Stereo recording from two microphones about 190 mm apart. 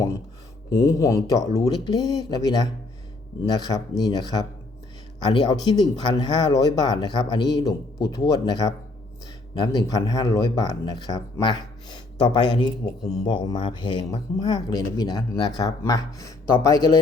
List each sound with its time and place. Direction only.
0.7 s speech: 15° left (ahead or behind)